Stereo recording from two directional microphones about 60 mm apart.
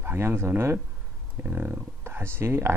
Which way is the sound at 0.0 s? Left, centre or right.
Right.